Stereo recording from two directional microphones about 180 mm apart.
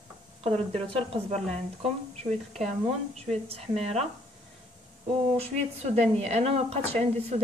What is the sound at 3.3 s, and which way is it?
Speech, 35° right (ahead or behind).